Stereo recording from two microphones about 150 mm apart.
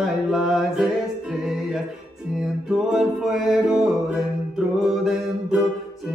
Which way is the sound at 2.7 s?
Centre (ahead or behind).